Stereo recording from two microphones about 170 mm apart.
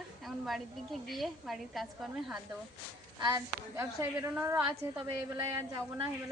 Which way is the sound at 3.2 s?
20° right (ahead or behind).